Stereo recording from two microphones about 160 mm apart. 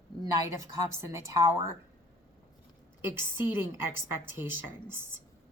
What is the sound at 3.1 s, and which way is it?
A woman's voice, 15° right (ahead or behind).